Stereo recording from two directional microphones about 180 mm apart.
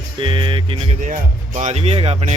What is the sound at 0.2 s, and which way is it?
Speech, 25° right (ahead or behind).